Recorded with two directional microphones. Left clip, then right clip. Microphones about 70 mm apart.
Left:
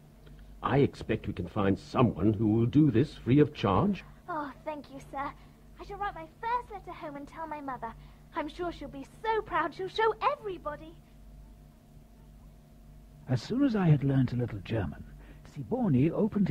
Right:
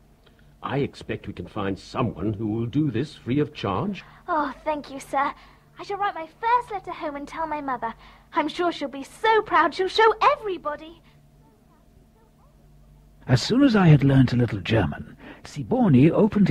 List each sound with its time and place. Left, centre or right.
0.6 s speech: centre
13.2 s speech: right